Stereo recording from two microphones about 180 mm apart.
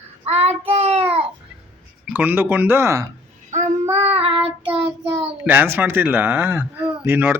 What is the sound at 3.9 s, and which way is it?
Child singing, 35° right (ahead or behind).